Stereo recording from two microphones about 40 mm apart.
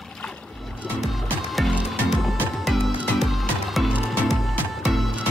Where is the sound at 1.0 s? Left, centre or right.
Centre.